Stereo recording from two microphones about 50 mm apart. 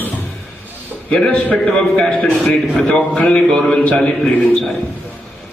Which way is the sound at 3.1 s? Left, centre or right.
Centre.